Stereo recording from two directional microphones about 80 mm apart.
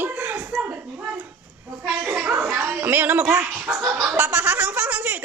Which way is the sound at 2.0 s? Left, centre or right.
Centre.